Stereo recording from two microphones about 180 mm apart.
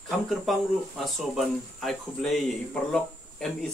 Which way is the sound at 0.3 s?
Centre (ahead or behind).